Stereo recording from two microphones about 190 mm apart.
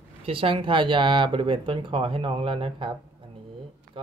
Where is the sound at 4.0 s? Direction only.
30° right (ahead or behind).